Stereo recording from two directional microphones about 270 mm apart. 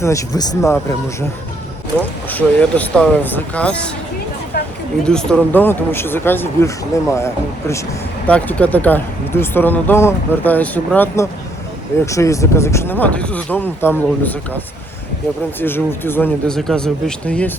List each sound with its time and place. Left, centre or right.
0.0 s speech: centre
2.0 s speech: centre
5.0 s speech: centre
8.3 s speech: centre
15.6 s speech: centre